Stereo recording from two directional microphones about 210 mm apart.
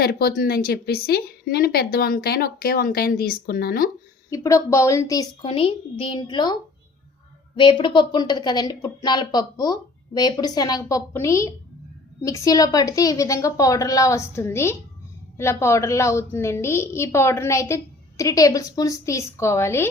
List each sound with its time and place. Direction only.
0.0 s a woman's voice: 45° left (ahead or behind)
4.3 s a woman's voice: 15° left (ahead or behind)